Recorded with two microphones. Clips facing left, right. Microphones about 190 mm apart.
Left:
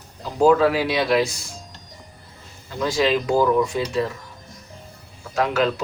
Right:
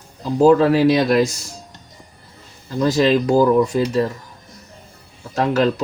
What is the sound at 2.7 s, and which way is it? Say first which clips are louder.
Speech: right 5 dB; 40° right (ahead or behind).